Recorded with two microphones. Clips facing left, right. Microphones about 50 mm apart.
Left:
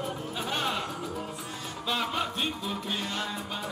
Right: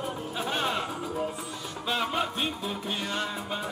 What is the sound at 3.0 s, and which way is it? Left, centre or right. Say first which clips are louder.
Music: right 2 dB; right.